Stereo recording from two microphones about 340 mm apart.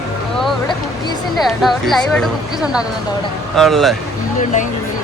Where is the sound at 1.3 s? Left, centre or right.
Centre.